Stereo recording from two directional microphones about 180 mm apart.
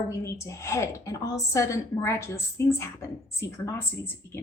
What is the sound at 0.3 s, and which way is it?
A woman's voice, 15° left (ahead or behind).